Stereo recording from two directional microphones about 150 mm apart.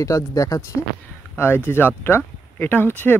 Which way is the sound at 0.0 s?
20° left (ahead or behind).